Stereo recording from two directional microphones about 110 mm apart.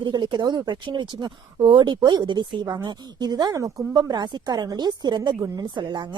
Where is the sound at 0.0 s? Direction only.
40° right (ahead or behind).